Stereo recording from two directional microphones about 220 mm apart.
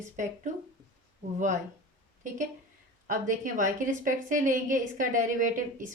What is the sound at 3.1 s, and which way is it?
A woman's voice, 35° right (ahead or behind).